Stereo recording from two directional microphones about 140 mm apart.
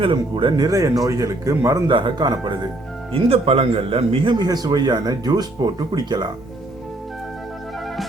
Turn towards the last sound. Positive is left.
turn(degrees=-30)  # may be behind; listen again after turning